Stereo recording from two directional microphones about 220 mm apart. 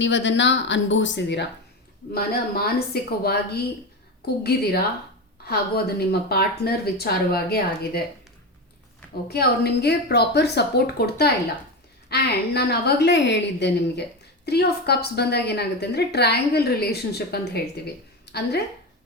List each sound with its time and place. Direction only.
0.0 s a woman's voice: 55° left (ahead or behind)
9.3 s a woman's voice: 45° left (ahead or behind)